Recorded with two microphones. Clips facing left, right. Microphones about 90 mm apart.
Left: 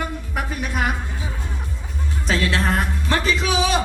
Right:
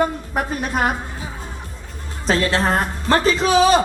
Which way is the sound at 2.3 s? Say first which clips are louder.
Right 3 dB; 40° right (ahead or behind).